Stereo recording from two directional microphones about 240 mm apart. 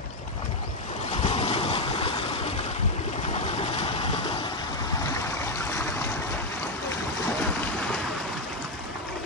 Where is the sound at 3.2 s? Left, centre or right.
Left.